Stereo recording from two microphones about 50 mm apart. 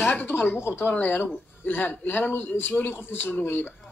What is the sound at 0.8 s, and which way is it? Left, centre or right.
A woman's voice, left.